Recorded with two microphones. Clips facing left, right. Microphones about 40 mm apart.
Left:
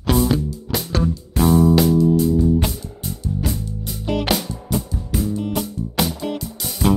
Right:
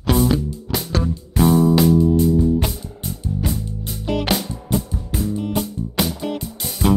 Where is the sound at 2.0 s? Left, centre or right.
Right.